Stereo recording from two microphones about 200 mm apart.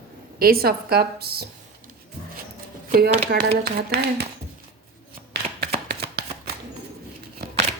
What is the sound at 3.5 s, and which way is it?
Speech, 50° right (ahead or behind).